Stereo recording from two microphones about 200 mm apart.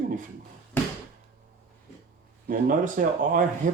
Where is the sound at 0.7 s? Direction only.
10° left (ahead or behind).